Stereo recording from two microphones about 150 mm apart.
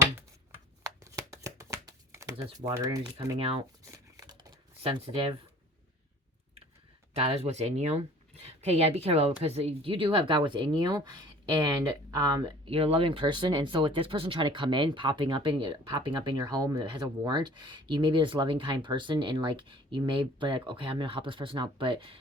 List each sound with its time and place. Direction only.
1.0 s shuffling cards: 20° right (ahead or behind)
3.3 s speech: 35° right (ahead or behind)
3.9 s a sound: 20° right (ahead or behind)
4.8 s speech: 40° right (ahead or behind)
7.1 s speech: 45° right (ahead or behind); by 12.5 s 25° right (ahead or behind)
12.6 s speech: 40° right (ahead or behind)